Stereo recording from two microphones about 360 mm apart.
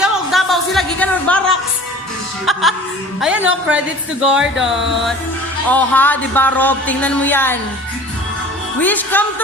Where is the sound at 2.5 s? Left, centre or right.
Centre.